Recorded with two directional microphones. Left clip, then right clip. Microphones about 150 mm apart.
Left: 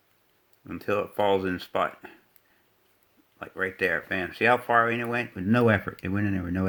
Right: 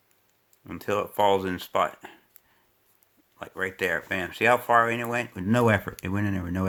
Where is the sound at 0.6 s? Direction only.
30° right (ahead or behind).